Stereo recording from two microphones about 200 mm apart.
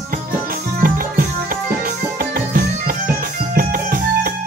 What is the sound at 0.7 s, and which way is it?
Music, 45° right (ahead or behind).